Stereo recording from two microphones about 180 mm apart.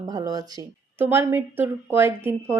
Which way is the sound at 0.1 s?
20° right (ahead or behind).